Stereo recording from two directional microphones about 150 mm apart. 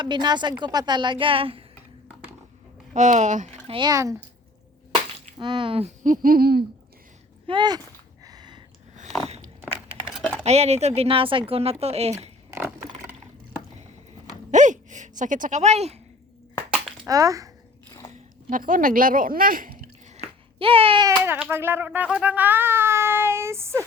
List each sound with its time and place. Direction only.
0.0 s a woman's voice: 30° right (ahead or behind)
2.9 s speech: 55° right (ahead or behind)
3.7 s speech: 30° right (ahead or behind)
5.4 s a woman's voice: 30° right (ahead or behind)
6.0 s speech: 65° right (ahead or behind); by 6.7 s 90° right
7.4 s speech: 30° right (ahead or behind)
8.2 s a sound: 25° right (ahead or behind)
10.2 s a sound: 5° right (ahead or behind)
10.4 s speech: 45° right (ahead or behind)
14.5 s a sound: 55° right (ahead or behind)
17.1 s speech: 20° right (ahead or behind)
18.5 s speech: 65° right (ahead or behind)
20.6 s a woman's voice: 40° right (ahead or behind)
21.2 s speech: 10° right (ahead or behind)